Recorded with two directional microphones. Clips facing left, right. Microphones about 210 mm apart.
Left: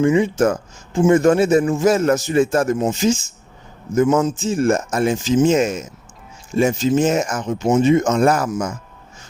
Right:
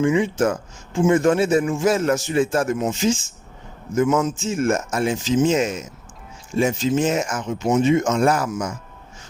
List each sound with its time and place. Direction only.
0.0 s a man's voice: 40° left (ahead or behind)